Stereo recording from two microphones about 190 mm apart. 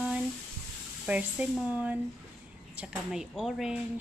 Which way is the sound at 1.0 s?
5° right (ahead or behind).